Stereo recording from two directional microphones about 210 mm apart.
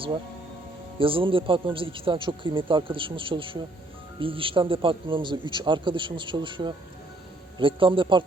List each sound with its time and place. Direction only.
0.9 s speech: 25° right (ahead or behind)